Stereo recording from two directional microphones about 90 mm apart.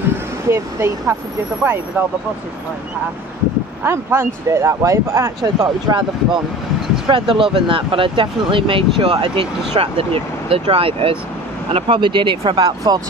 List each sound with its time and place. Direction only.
0.5 s speech: 30° right (ahead or behind)
3.8 s speech: 30° right (ahead or behind)
5.6 s speech: 60° right (ahead or behind); by 11.1 s 90° right
11.7 s speech: 65° right (ahead or behind); by 13.0 s 45° right (ahead or behind)